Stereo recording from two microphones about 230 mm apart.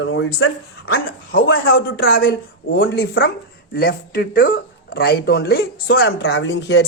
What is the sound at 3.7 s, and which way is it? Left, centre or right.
Speech, left.